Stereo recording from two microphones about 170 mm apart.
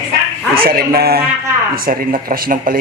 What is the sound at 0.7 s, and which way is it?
Speech, 60° right (ahead or behind).